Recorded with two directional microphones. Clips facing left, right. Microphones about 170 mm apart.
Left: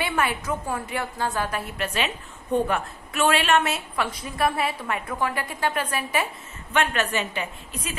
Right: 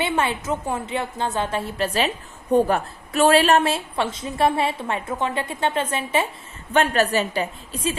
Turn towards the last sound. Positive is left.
turn(degrees=-30)  # may be behind; listen again after turning